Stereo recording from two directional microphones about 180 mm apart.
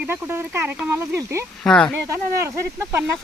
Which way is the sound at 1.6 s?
5° left (ahead or behind).